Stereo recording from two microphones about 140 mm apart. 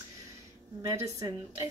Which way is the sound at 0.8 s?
25° right (ahead or behind).